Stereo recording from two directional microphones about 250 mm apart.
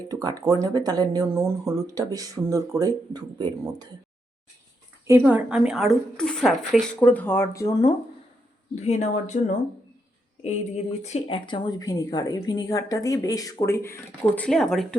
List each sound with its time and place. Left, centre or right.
0.1 s speech: centre
5.0 s a woman's voice: centre
8.7 s speech: left; by 14.9 s centre